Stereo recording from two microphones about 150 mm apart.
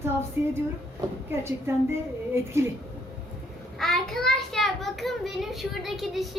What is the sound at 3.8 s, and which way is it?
Child singing, 5° left (ahead or behind).